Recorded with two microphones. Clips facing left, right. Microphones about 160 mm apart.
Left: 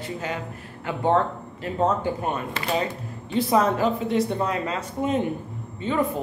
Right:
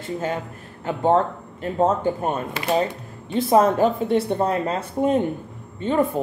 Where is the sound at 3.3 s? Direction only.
50° right (ahead or behind).